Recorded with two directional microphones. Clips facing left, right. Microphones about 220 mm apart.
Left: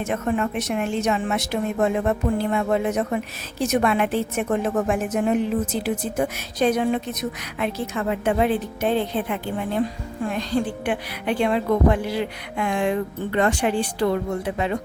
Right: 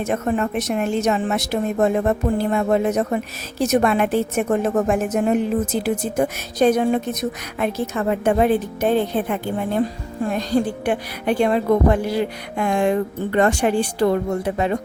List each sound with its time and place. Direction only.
0.0 s a woman's voice: 40° right (ahead or behind)